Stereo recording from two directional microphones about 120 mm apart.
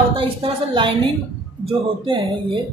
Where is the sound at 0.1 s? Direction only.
45° right (ahead or behind).